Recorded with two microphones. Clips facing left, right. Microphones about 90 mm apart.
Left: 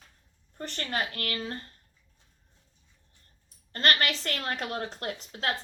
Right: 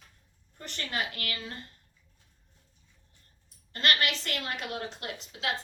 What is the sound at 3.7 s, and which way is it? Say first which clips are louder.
A woman's voice: left 2 dB; 40° left (ahead or behind).